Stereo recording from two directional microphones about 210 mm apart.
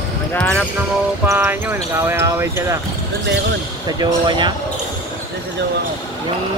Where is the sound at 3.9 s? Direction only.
20° right (ahead or behind).